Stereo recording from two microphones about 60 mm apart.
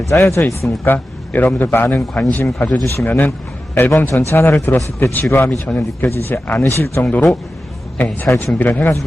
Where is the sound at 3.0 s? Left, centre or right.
Left.